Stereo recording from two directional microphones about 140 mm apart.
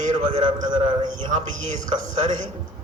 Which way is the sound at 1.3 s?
55° right (ahead or behind).